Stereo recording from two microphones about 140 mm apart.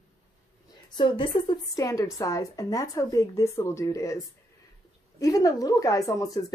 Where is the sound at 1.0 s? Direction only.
35° left (ahead or behind).